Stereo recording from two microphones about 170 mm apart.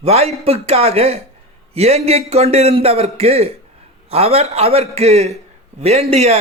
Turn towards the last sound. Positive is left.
turn(degrees=-35)  # may be behind; listen again after turning